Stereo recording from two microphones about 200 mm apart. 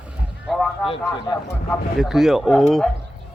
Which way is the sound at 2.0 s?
Centre (ahead or behind).